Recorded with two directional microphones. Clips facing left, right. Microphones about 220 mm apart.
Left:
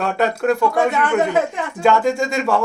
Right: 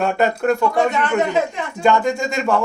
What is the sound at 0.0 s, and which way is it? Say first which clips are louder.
Speech: right 1 dB; centre (ahead or behind).